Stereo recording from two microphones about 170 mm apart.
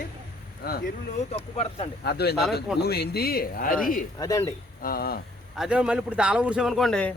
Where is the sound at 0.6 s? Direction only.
65° left (ahead or behind).